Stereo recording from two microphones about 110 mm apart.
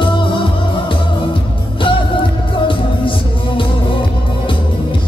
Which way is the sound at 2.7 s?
50° left (ahead or behind).